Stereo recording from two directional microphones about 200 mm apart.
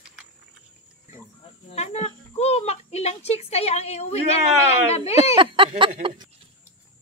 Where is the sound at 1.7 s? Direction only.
35° left (ahead or behind).